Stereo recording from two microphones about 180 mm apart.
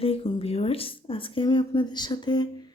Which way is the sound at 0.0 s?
30° left (ahead or behind).